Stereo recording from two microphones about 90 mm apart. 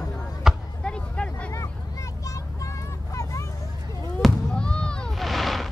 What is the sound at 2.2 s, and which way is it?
Vehicle, 35° left (ahead or behind).